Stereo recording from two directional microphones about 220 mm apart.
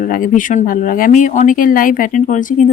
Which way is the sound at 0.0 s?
40° left (ahead or behind).